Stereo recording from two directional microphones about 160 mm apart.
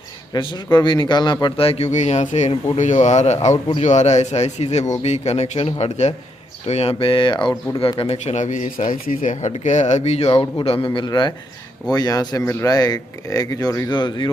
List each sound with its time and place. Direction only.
0.3 s a man's voice: 30° left (ahead or behind)